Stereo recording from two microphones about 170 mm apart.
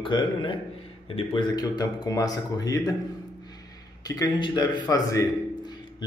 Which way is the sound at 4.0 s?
20° left (ahead or behind).